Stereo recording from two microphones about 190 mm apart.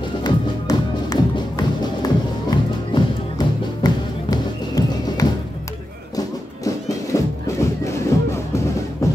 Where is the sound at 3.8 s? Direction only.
20° left (ahead or behind).